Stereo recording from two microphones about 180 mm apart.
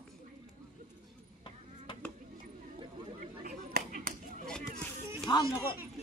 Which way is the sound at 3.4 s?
50° right (ahead or behind).